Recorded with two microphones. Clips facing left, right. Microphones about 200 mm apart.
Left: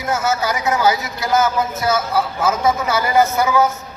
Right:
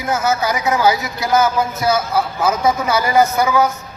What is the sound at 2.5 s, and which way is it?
A man's voice, 15° right (ahead or behind).